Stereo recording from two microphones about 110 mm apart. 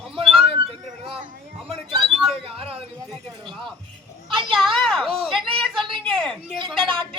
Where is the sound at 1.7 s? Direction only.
45° right (ahead or behind).